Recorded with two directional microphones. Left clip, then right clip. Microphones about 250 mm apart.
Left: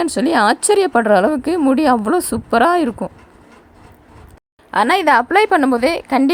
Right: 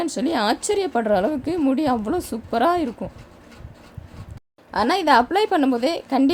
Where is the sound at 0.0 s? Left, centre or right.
Left.